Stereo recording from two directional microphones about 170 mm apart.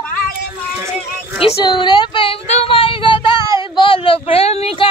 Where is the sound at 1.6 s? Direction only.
25° left (ahead or behind).